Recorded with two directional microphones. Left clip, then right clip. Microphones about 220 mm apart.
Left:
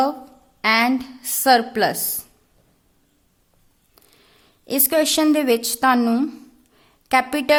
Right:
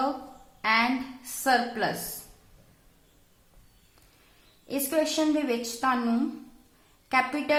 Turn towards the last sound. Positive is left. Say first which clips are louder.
# left 8 dB
turn(degrees=50)  # may be behind; listen again after turning